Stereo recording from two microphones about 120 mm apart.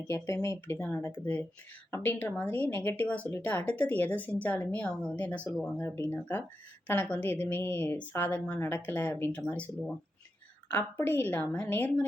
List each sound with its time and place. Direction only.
0.4 s speech: 25° left (ahead or behind)
0.8 s speech: 10° left (ahead or behind)
5.7 s speech: 20° left (ahead or behind)